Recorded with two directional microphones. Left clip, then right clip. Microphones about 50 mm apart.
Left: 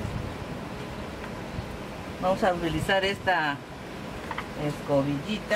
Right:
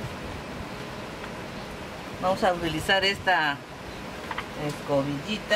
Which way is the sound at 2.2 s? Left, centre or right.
Right.